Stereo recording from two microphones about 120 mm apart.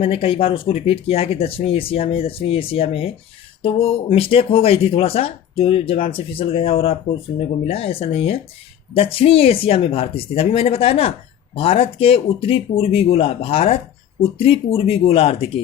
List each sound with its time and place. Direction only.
0.0 s speech: 50° left (ahead or behind)